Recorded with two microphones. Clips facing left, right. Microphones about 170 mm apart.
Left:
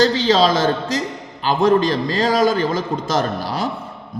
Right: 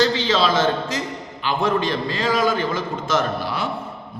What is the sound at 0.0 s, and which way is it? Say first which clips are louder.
A man's voice: left 4 dB; 40° left (ahead or behind).